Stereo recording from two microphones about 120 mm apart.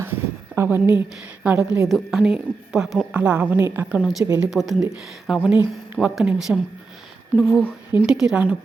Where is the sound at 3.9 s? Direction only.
5° right (ahead or behind).